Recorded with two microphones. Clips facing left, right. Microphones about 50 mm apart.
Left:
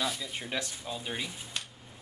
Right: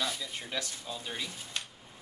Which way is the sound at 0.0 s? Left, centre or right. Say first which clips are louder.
Left 2 dB; centre.